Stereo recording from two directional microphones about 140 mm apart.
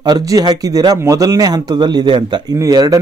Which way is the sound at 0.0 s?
30° right (ahead or behind).